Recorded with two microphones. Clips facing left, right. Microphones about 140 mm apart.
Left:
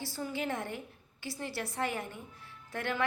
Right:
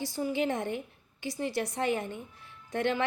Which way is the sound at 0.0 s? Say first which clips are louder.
Right 6 dB; 15° right (ahead or behind).